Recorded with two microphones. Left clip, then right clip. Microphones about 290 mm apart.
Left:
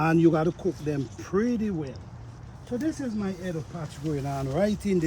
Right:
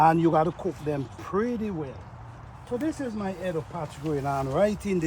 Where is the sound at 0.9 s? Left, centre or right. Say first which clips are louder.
Even; centre.